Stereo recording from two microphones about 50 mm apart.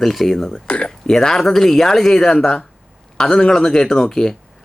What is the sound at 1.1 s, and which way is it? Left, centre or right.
A woman's voice, centre.